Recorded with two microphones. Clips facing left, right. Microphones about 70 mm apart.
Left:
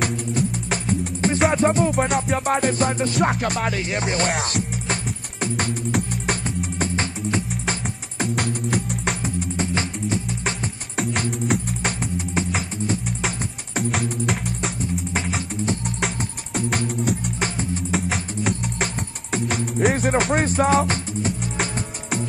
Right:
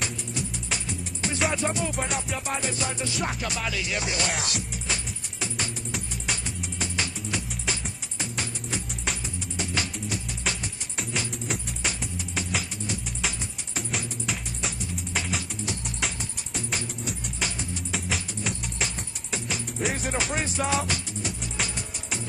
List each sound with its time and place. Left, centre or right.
0.0 s music: left
4.3 s music: left
9.6 s music: left
11.0 s music: left
13.7 s music: left
16.0 s music: left
17.4 s music: left
17.9 s music: left